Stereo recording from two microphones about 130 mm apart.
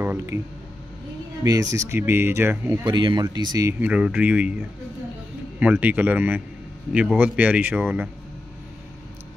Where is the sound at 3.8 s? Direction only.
10° right (ahead or behind).